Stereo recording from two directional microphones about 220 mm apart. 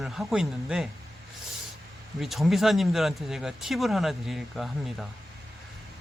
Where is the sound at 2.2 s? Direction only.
Centre (ahead or behind).